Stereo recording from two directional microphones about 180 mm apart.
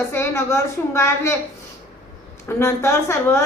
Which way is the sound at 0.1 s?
15° left (ahead or behind).